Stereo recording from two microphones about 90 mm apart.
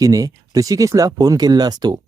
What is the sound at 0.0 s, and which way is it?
Speech, 40° right (ahead or behind).